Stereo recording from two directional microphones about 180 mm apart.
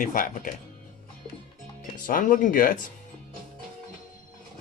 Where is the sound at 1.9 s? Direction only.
45° left (ahead or behind).